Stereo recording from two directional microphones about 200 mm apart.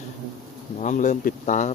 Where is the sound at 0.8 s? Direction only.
40° left (ahead or behind).